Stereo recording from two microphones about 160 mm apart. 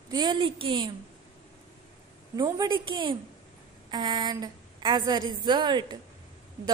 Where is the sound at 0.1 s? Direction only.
25° right (ahead or behind).